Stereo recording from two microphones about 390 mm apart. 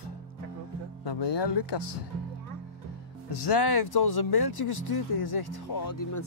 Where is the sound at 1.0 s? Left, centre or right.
Left.